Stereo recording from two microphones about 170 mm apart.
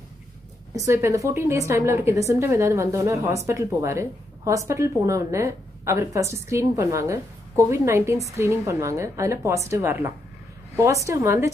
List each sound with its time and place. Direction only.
0.7 s a woman's voice: 15° right (ahead or behind)